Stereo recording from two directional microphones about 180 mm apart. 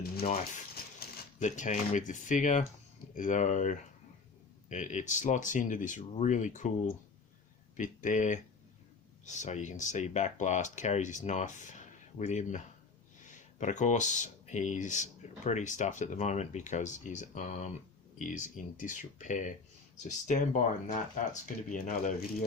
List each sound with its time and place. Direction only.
0.3 s speech: 40° left (ahead or behind)